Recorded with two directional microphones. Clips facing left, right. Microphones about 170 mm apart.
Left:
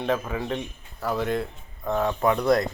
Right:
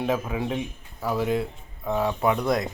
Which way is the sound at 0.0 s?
5° right (ahead or behind).